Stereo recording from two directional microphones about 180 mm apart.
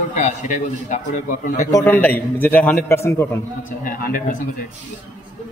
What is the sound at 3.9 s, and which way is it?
Speech, 50° left (ahead or behind).